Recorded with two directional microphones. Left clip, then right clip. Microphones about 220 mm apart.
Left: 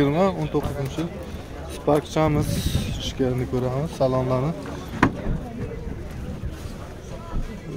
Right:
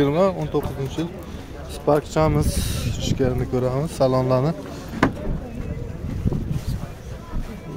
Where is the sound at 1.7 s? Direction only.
15° right (ahead or behind).